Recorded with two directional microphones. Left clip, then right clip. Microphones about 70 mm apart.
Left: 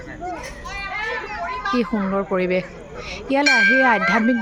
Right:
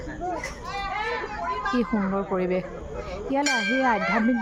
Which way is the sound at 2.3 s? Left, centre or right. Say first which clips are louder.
Left 5 dB; left.